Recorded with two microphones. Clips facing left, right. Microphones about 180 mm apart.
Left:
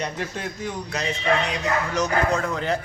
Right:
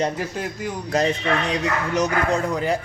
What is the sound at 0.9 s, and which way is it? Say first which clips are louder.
Speech: right 11 dB; 45° right (ahead or behind).